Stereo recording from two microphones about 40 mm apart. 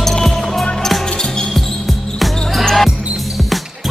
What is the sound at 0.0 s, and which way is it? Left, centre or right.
Music, centre.